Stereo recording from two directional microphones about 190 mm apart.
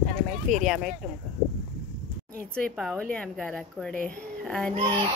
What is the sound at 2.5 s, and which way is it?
Speech, 5° left (ahead or behind).